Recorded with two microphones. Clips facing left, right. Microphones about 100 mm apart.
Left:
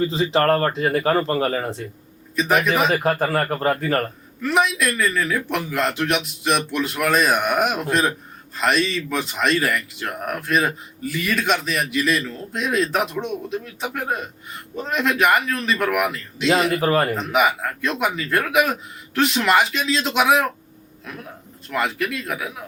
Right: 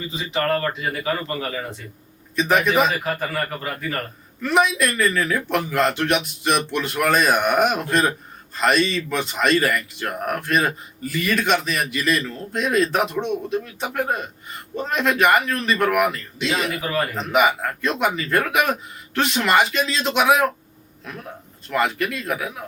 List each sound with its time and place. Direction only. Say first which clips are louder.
0.3 s speech: left 3 dB; 40° left (ahead or behind)
2.3 s speech: right 1 dB; centre (ahead or behind)
2.9 s speech: left 5 dB; 40° left (ahead or behind)
4.4 s speech: right 1 dB; centre (ahead or behind)
16.7 s speech: left 7 dB; 40° left (ahead or behind)
17.2 s speech: right 1 dB; centre (ahead or behind)
21.7 s speech: right 2 dB; centre (ahead or behind)